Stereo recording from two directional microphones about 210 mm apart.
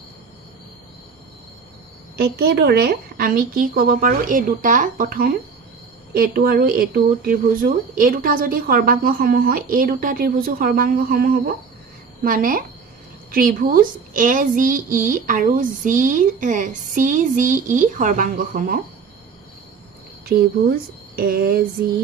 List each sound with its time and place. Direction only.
2.1 s a woman's voice: 50° right (ahead or behind)
20.2 s speech: 45° right (ahead or behind)